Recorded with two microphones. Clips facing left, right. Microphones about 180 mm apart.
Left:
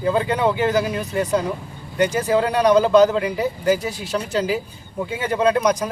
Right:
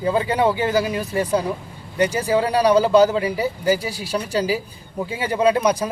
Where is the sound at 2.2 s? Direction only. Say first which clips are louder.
Even; 10° right (ahead or behind).